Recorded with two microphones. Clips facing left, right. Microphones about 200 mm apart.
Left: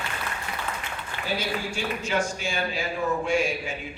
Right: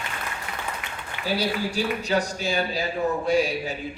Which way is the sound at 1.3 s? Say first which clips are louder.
Right 5 dB; 35° right (ahead or behind).